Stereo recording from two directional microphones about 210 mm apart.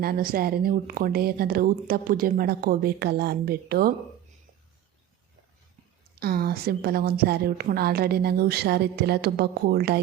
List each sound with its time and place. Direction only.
0.0 s speech: 45° right (ahead or behind)
6.1 s speech: 45° right (ahead or behind)